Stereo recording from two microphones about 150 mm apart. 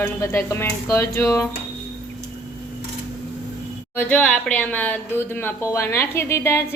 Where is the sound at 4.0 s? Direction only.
10° left (ahead or behind).